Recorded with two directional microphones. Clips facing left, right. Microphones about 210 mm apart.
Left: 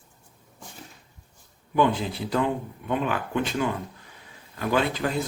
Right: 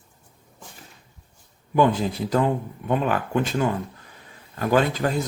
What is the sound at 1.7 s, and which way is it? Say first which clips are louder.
Speech: right 3 dB; 45° right (ahead or behind).